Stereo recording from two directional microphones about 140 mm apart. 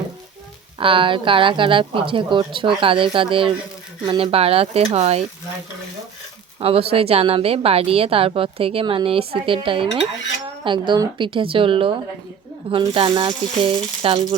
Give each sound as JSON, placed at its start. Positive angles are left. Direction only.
{"t": 0.8, "sound": "a woman's voice", "side_deg": -40}
{"t": 6.6, "sound": "a woman's voice", "side_deg": -45}